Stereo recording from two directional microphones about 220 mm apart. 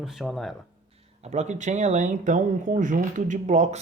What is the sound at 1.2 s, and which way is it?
Speech, 30° right (ahead or behind).